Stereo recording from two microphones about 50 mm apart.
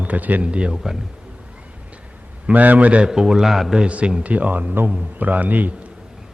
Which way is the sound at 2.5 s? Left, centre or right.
Right.